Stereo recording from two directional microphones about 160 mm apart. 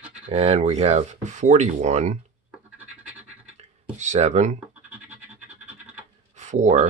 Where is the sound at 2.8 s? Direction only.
10° right (ahead or behind).